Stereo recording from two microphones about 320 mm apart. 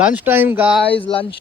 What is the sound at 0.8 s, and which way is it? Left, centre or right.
Speech, centre.